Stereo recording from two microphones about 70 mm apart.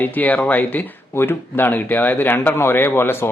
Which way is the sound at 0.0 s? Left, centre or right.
Left.